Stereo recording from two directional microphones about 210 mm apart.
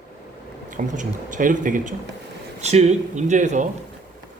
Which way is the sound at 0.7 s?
35° right (ahead or behind).